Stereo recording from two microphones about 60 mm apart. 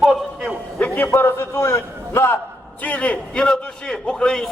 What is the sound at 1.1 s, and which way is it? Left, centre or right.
A man's voice, left.